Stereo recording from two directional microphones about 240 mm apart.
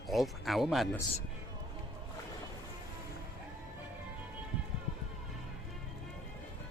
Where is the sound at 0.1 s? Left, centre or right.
Centre.